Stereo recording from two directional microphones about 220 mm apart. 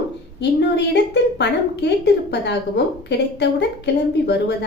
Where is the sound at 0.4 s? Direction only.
50° left (ahead or behind).